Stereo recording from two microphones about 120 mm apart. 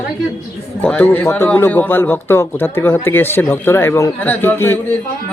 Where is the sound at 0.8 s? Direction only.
15° left (ahead or behind).